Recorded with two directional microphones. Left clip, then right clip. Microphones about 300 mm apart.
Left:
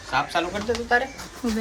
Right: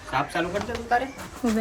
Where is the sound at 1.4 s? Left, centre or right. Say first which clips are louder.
Right 2 dB; centre.